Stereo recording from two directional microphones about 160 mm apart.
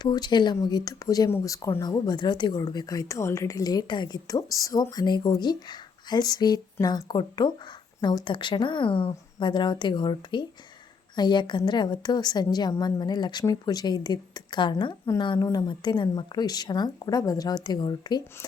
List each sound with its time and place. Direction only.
0.0 s speech: 25° left (ahead or behind)